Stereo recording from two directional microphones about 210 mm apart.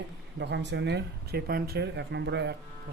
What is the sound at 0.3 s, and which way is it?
Speech, 55° right (ahead or behind).